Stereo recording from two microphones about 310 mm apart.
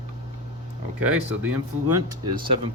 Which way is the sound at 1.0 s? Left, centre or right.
Centre.